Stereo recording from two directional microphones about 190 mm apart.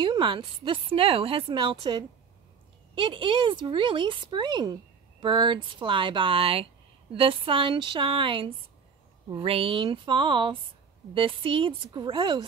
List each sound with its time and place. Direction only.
0.0 s speech: 25° right (ahead or behind)